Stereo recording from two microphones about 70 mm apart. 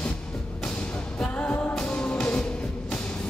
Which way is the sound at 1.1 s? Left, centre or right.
Centre.